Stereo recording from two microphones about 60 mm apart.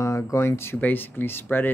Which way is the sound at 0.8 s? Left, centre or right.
Left.